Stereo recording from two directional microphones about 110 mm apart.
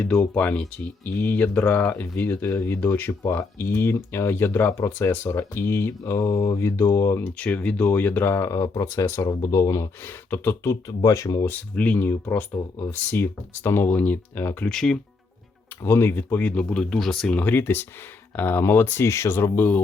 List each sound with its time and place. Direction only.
0.0 s speech: 10° left (ahead or behind)
7.3 s speech: 15° left (ahead or behind); by 9.9 s 30° left (ahead or behind)
10.2 s speech: 20° left (ahead or behind)
11.4 s speech: 15° left (ahead or behind)
14.7 s speech: 5° left (ahead or behind)
15.8 s speech: 20° left (ahead or behind)